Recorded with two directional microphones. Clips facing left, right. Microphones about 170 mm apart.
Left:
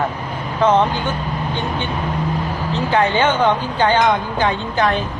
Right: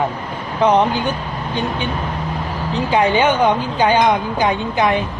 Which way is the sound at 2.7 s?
15° right (ahead or behind).